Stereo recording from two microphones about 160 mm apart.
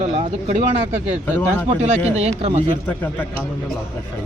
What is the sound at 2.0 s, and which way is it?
Speech, 40° right (ahead or behind).